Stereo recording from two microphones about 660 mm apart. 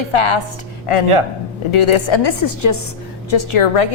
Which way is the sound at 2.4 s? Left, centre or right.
Left.